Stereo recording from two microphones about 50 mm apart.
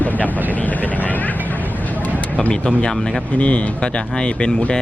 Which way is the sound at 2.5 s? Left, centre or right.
Centre.